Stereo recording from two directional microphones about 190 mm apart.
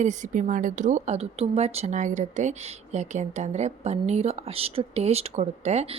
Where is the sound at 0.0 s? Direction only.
40° right (ahead or behind).